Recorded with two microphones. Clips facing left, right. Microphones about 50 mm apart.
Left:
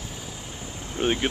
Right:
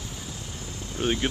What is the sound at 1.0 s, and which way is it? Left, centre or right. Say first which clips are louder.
Speech: left 2 dB; centre.